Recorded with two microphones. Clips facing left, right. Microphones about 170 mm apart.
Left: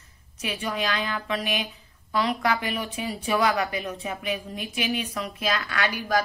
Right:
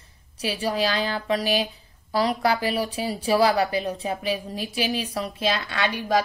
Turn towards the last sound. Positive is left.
turn(degrees=-25)  # may be behind; listen again after turning